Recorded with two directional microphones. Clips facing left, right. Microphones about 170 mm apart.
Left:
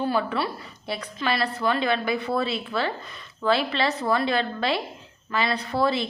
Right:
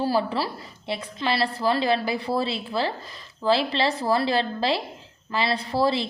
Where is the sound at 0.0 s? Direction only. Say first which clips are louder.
Right 1 dB; 30° right (ahead or behind).